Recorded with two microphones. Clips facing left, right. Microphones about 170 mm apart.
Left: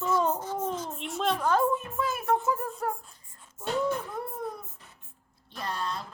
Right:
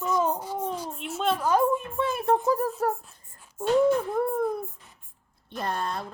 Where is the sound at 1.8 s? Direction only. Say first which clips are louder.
Right 4 dB; 30° right (ahead or behind).